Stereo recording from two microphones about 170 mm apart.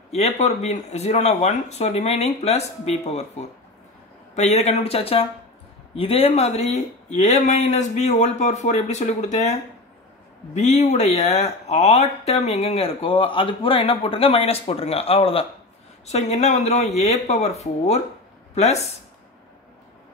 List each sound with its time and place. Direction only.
0.1 s speech: 40° left (ahead or behind)